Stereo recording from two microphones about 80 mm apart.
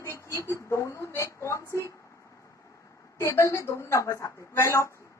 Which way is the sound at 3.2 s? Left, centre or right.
Left.